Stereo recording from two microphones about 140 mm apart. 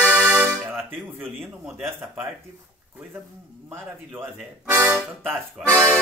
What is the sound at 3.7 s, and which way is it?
A man's voice, 15° right (ahead or behind).